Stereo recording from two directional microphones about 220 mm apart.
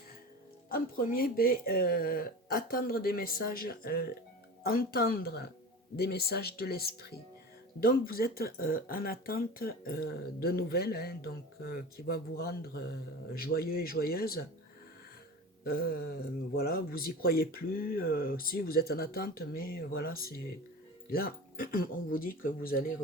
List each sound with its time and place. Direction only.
0.7 s speech: 40° left (ahead or behind)
15.6 s speech: 45° left (ahead or behind)